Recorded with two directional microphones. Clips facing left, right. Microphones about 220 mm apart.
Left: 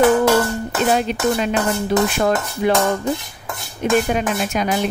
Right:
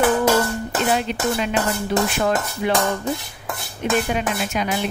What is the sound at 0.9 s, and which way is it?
Speech, 40° left (ahead or behind).